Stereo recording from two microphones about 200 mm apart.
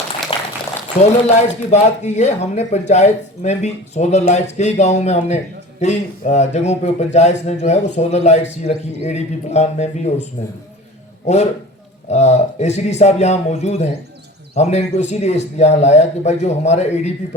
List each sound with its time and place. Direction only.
0.3 s a sound: 30° left (ahead or behind)
1.0 s a man's voice: 35° left (ahead or behind)
12.0 s a man's voice: 35° left (ahead or behind)